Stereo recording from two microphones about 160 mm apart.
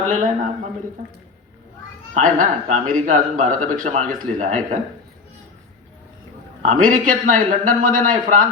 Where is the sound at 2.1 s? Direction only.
50° right (ahead or behind).